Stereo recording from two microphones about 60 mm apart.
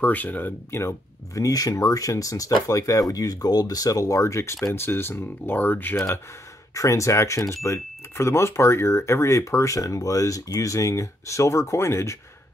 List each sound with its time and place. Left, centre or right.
0.0 s speech: left
0.7 s speech: left
1.3 s speech: left
4.7 s speech: left
6.7 s speech: left